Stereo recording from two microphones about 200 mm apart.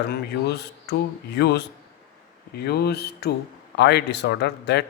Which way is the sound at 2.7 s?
55° left (ahead or behind).